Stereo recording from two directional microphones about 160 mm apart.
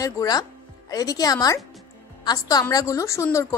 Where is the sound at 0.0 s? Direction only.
25° left (ahead or behind).